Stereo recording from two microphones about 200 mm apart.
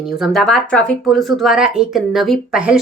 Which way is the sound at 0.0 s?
Centre (ahead or behind).